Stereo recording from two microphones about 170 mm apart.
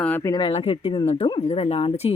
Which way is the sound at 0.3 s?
25° left (ahead or behind).